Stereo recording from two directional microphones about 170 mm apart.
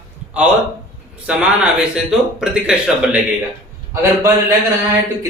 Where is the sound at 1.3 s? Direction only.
5° right (ahead or behind).